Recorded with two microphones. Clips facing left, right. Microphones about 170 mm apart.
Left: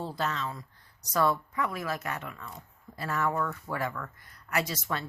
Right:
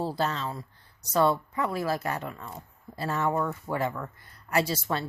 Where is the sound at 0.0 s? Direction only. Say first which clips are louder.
Right 4 dB; 35° right (ahead or behind).